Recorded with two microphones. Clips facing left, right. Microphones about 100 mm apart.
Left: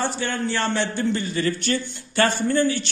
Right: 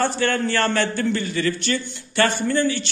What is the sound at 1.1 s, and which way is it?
A man's voice, 35° left (ahead or behind).